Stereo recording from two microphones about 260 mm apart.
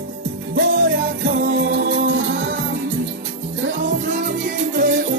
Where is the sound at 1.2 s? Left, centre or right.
Right.